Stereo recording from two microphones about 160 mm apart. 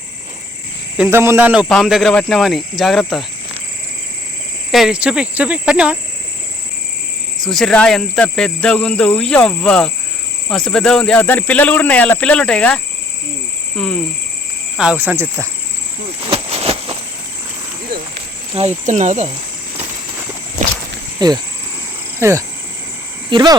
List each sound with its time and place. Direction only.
0.9 s cricket: 15° right (ahead or behind)
1.6 s speech: centre (ahead or behind)
4.7 s cricket: 5° right (ahead or behind)
7.4 s speech: centre (ahead or behind)
14.8 s cricket: 10° right (ahead or behind)
16.2 s a sound: 35° right (ahead or behind)
18.5 s speech: 45° right (ahead or behind)
21.2 s speech: 25° right (ahead or behind)
22.2 s cricket: 20° right (ahead or behind)
23.3 s insect: 25° right (ahead or behind)